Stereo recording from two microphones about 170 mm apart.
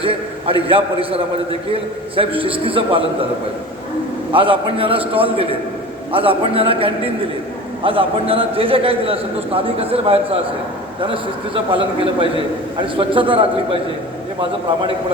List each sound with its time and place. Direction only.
0.0 s a man's voice: 30° right (ahead or behind)
4.3 s a man's voice: 30° right (ahead or behind)